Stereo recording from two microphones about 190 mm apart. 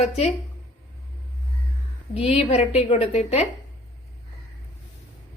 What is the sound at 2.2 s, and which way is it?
A woman's voice, 30° left (ahead or behind).